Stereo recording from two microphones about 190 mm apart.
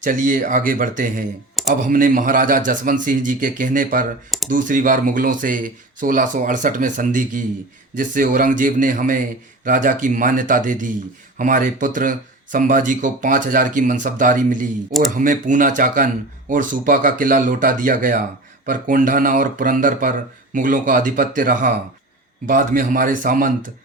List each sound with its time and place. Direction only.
0.0 s speech: 45° right (ahead or behind)